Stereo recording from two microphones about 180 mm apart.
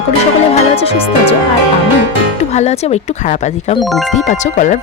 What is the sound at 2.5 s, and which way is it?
Speech, 35° left (ahead or behind).